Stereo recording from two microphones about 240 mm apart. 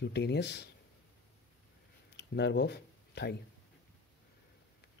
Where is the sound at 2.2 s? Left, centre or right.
Left.